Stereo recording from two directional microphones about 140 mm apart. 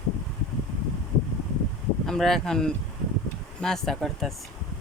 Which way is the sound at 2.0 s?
Centre (ahead or behind).